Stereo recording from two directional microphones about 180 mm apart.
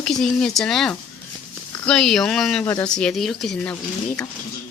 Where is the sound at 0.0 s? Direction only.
5° left (ahead or behind).